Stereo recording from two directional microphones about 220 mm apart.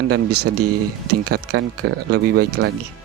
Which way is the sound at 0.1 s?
90° right.